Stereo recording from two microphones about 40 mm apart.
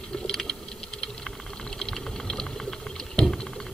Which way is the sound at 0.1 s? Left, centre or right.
Centre.